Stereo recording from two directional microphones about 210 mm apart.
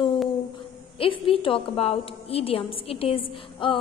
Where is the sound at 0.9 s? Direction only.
25° left (ahead or behind).